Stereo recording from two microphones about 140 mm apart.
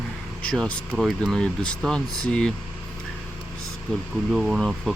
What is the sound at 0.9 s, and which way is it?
Speech, 5° right (ahead or behind).